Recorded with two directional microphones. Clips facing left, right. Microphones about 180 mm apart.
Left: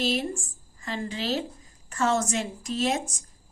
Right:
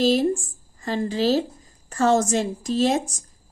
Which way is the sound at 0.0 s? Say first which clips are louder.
Right 8 dB; 35° right (ahead or behind).